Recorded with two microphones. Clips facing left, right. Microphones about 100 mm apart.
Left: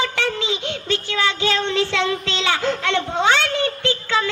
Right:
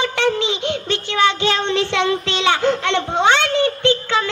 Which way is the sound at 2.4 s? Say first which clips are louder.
Right 4 dB; 20° right (ahead or behind).